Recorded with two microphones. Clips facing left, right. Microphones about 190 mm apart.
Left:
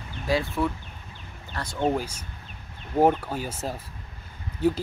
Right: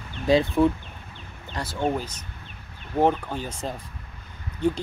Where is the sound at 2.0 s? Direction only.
10° left (ahead or behind).